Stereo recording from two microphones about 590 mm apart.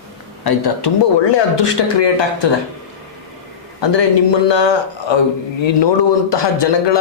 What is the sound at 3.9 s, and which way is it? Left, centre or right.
A man's voice, left.